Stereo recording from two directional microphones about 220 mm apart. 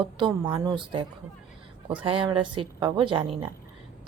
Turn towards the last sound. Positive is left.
turn(degrees=-25)  # may be behind; listen again after turning